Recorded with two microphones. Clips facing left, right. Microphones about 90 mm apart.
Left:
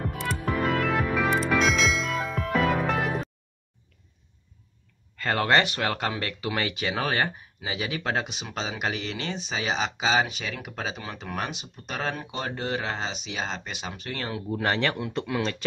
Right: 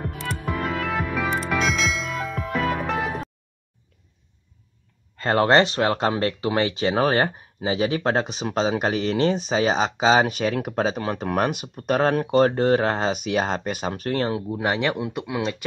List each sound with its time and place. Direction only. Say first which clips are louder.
0.1 s music: even; centre (ahead or behind)
5.1 s speech: right 5 dB; 30° right (ahead or behind)
11.1 s speech: right 10 dB; 50° right (ahead or behind)
14.5 s speech: right 3 dB; 15° right (ahead or behind)